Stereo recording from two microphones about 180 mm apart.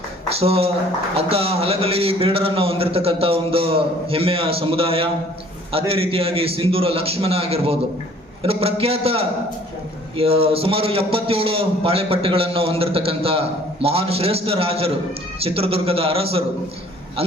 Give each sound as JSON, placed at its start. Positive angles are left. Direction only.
{"t": 0.3, "sound": "a man's voice", "side_deg": -35}